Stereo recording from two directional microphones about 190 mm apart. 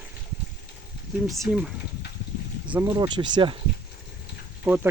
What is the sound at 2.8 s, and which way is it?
Speech, 20° right (ahead or behind).